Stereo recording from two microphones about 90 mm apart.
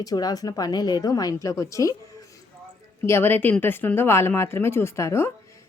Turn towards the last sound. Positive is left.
turn(degrees=30)  # may be behind; listen again after turning